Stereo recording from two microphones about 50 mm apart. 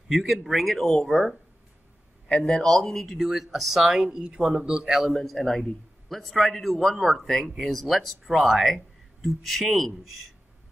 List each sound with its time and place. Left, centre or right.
0.1 s speech: centre; by 2.6 s left
2.6 s speech: centre
3.2 s speech: centre
5.1 s speech: centre